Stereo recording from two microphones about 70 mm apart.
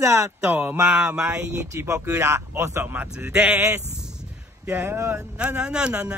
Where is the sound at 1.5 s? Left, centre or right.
Right.